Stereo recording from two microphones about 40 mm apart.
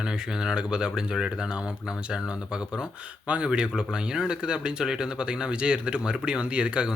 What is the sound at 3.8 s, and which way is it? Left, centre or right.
Speech, centre.